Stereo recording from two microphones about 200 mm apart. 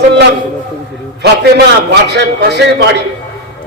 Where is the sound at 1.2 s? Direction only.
55° right (ahead or behind).